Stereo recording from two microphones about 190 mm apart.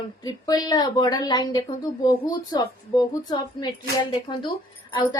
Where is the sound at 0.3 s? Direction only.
20° left (ahead or behind).